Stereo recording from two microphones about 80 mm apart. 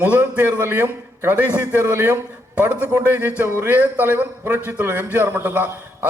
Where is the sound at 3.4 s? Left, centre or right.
Right.